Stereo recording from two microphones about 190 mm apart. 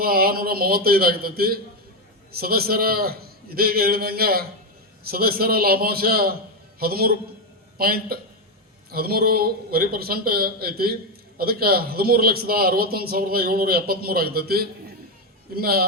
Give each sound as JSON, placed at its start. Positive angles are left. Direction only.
{"t": 0.0, "sound": "a man's voice", "side_deg": -50}